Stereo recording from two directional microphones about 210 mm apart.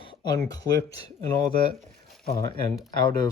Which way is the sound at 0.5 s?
15° left (ahead or behind).